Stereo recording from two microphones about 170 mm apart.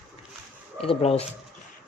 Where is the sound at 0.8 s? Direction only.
35° left (ahead or behind).